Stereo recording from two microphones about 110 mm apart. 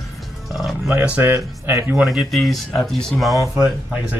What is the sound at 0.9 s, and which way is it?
Speech, 15° right (ahead or behind).